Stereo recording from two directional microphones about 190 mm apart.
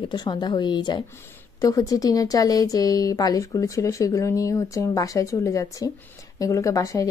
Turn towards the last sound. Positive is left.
turn(degrees=15)  # may be behind; listen again after turning